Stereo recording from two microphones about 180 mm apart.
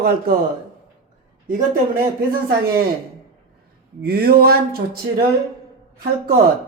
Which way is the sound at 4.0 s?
60° right (ahead or behind).